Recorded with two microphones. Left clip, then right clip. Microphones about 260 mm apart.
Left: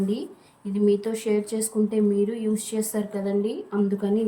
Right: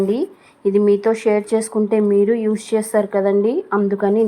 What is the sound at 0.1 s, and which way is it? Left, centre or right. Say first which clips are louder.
A woman's voice: right 10 dB; right.